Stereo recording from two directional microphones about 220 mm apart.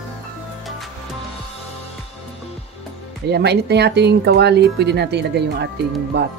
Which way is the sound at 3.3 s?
50° right (ahead or behind).